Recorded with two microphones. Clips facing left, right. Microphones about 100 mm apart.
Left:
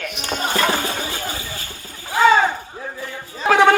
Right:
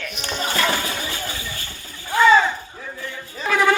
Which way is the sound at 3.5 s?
65° left (ahead or behind).